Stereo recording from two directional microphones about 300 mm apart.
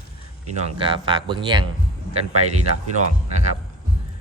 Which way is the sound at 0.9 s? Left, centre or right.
Centre.